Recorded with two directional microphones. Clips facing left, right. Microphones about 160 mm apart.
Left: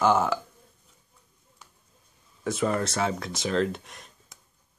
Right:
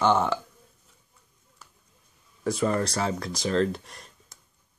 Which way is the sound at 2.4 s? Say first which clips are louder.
Right 1 dB; centre (ahead or behind).